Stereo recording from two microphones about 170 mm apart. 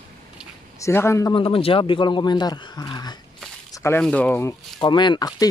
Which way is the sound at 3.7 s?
15° left (ahead or behind).